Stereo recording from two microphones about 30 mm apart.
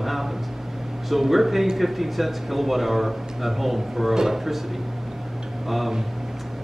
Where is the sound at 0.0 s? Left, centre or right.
Centre.